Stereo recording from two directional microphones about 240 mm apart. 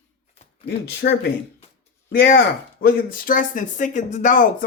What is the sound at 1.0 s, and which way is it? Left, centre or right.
Speech, left.